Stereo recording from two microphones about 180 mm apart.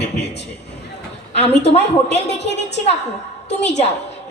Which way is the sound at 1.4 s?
35° left (ahead or behind).